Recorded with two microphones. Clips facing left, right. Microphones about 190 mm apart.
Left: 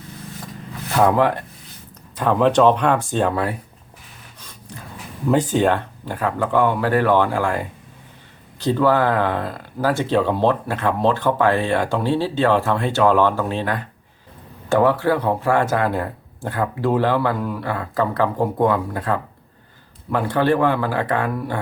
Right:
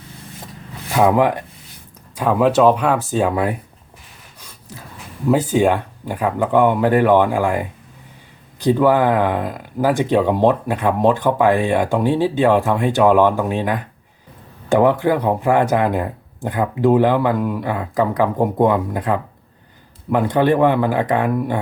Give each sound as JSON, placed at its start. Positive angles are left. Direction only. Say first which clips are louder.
{"t": 0.9, "sound": "speech", "louder": "right 2 dB", "side_deg": -10}
{"t": 5.3, "sound": "speech", "louder": "right 2 dB", "side_deg": -10}